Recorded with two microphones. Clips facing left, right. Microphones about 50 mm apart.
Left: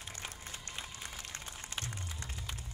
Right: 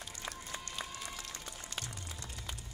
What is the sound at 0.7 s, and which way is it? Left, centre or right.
Applause, left.